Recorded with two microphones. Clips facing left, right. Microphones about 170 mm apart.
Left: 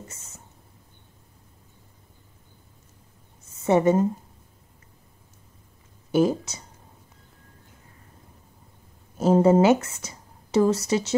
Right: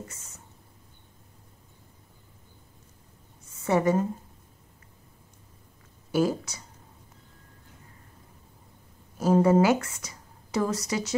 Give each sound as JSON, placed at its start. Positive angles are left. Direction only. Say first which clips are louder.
{"t": 3.6, "sound": "a woman's voice", "louder": "left 4 dB", "side_deg": 25}
{"t": 6.1, "sound": "a woman's voice", "louder": "left 4 dB", "side_deg": 20}
{"t": 9.2, "sound": "speech", "louder": "left 3 dB", "side_deg": 25}